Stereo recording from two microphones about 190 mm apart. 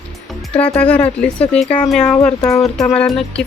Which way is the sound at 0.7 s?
5° left (ahead or behind).